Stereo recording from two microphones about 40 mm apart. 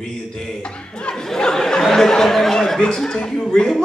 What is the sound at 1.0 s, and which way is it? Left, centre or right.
Speech, centre.